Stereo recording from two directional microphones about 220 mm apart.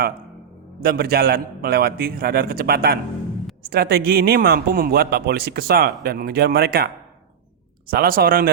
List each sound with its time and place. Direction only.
0.8 s speech: 45° right (ahead or behind)